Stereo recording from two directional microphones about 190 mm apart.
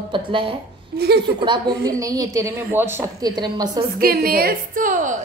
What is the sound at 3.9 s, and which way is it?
A woman's voice, 50° right (ahead or behind).